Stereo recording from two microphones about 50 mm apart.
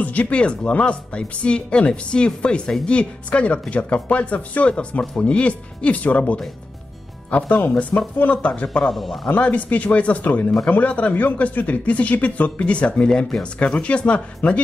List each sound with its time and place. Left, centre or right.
0.0 s speech: left
8.9 s speech: centre
9.3 s speech: left